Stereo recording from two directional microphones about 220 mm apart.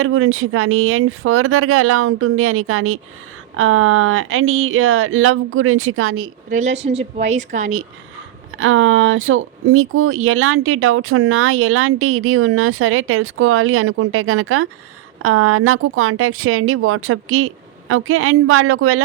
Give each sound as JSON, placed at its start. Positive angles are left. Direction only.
{"t": 0.0, "sound": "speech", "side_deg": -70}
{"t": 6.5, "sound": "a woman's voice", "side_deg": -30}
{"t": 8.5, "sound": "speech", "side_deg": -65}
{"t": 15.2, "sound": "speech", "side_deg": -80}